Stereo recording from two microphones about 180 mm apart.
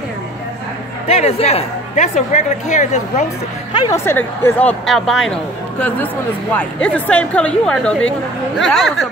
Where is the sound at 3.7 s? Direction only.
20° left (ahead or behind).